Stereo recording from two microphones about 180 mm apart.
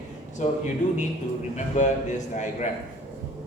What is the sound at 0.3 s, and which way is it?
Speech, 40° left (ahead or behind).